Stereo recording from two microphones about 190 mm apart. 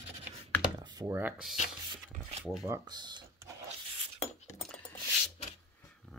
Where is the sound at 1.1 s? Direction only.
5° right (ahead or behind).